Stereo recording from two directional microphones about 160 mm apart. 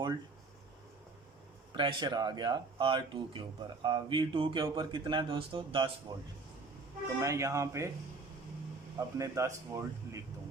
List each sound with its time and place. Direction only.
1.7 s speech: 30° right (ahead or behind)
3.8 s a sound: 30° right (ahead or behind)
4.6 s speech: 25° right (ahead or behind)
9.1 s speech: 20° right (ahead or behind)